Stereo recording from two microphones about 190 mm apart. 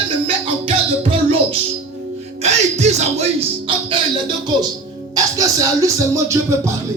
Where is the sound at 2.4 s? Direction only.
35° right (ahead or behind).